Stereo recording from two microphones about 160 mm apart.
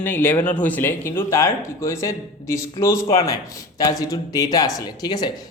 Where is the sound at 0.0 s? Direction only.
10° left (ahead or behind).